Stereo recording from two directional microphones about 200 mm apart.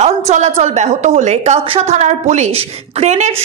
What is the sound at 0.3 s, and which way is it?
A woman's voice, 35° right (ahead or behind).